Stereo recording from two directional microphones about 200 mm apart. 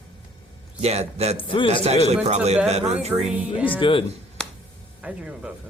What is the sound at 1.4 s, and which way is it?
Speech, 25° left (ahead or behind).